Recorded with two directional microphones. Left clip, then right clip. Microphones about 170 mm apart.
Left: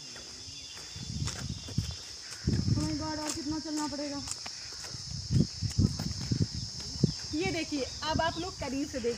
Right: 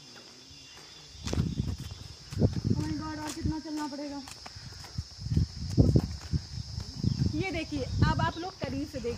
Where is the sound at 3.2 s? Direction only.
15° right (ahead or behind).